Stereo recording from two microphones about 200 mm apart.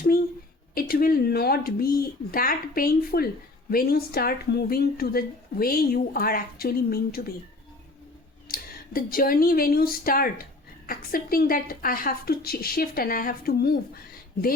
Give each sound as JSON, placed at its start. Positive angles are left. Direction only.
{"t": 0.7, "sound": "speech", "side_deg": 45}
{"t": 8.4, "sound": "speech", "side_deg": 45}